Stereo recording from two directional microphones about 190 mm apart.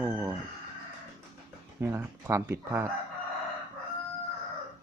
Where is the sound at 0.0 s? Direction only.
10° right (ahead or behind).